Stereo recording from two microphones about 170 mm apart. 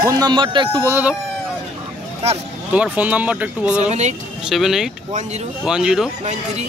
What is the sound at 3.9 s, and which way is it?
Speech, 40° right (ahead or behind).